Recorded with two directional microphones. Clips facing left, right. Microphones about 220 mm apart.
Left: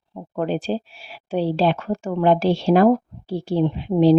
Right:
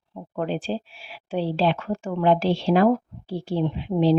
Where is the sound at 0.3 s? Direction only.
45° left (ahead or behind).